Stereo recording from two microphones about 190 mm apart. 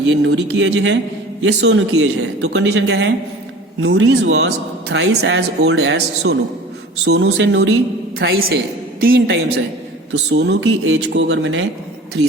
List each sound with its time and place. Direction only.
0.1 s a man's voice: 70° right (ahead or behind)
3.8 s a man's voice: 80° right